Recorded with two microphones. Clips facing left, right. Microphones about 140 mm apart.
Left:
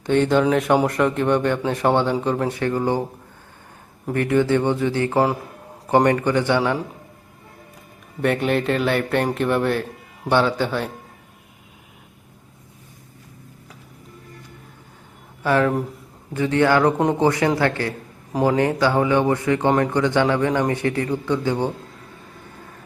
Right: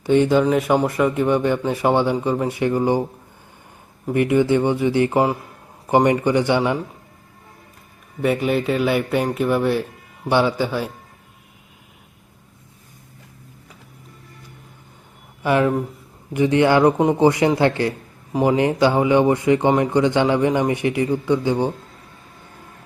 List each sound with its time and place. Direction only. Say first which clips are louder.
0.0 s a man's voice: right 2 dB; 10° right (ahead or behind)
4.1 s a man's voice: right 2 dB; 15° right (ahead or behind)
8.2 s a man's voice: right 1 dB; centre (ahead or behind)
15.4 s a man's voice: right 1 dB; 15° right (ahead or behind)